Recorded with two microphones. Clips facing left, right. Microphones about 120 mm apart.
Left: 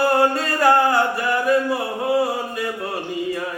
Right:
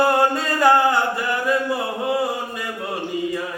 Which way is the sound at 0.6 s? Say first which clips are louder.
Even; 20° right (ahead or behind).